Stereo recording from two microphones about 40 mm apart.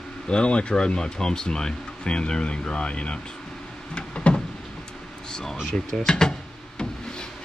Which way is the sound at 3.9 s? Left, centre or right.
Left.